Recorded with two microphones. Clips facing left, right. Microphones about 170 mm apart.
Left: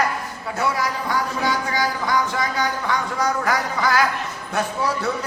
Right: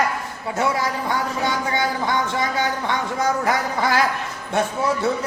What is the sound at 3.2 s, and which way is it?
Speech, 25° right (ahead or behind).